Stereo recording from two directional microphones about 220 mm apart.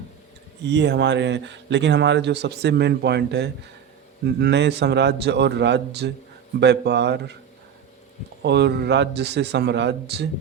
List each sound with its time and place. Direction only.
0.6 s speech: 50° right (ahead or behind)
8.4 s speech: 50° right (ahead or behind)